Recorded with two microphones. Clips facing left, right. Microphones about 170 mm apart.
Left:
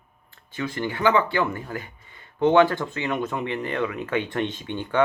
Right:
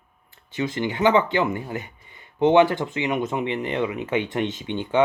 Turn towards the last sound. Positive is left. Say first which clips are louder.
# right 2 dB
turn(degrees=-20)  # may be behind; listen again after turning